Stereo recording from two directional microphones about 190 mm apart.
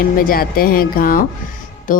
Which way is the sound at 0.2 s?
50° left (ahead or behind).